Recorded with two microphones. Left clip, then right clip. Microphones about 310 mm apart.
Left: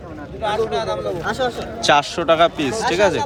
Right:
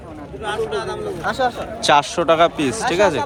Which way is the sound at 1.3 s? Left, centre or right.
Centre.